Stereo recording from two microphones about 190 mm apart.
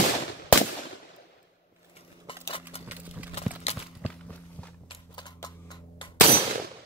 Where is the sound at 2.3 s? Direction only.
30° left (ahead or behind).